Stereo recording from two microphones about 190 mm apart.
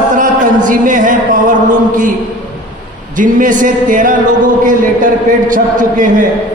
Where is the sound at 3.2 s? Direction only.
45° right (ahead or behind).